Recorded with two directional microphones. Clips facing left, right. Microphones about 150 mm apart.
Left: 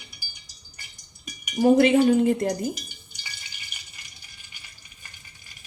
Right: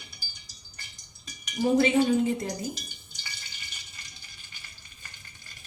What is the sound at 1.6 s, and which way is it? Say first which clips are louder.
Speech: left 5 dB; 50° left (ahead or behind).